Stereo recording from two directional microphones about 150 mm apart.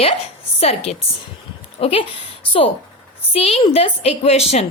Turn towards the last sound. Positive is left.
turn(degrees=45)  # may be behind; listen again after turning